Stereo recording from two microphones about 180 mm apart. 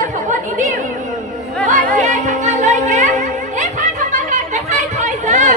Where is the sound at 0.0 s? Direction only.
45° right (ahead or behind).